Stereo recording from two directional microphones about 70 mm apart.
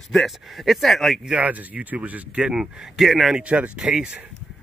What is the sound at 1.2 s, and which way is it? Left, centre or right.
Speech, centre.